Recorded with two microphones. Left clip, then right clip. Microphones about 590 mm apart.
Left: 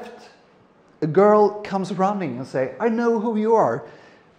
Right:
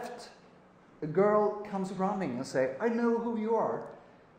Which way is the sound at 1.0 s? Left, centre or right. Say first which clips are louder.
Left 11 dB; left.